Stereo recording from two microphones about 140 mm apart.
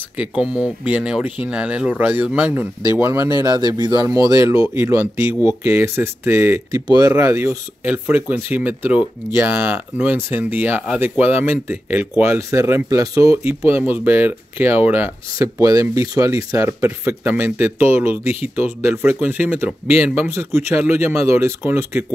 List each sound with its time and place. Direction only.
0.4 s speech: 10° right (ahead or behind)